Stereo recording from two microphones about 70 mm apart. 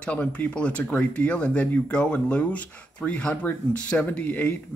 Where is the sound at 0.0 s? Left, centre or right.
Centre.